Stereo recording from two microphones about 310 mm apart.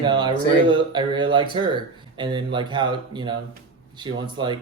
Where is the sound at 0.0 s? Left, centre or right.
Centre.